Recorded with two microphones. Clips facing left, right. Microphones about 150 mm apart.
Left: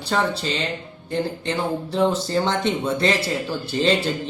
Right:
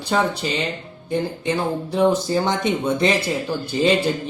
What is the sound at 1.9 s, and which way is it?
Speech, 15° right (ahead or behind).